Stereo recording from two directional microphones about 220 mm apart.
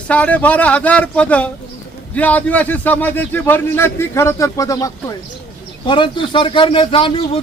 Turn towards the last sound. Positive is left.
turn(degrees=25)  # may be behind; listen again after turning